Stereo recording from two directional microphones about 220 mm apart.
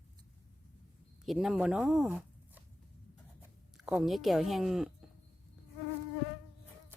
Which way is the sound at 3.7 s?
5° right (ahead or behind).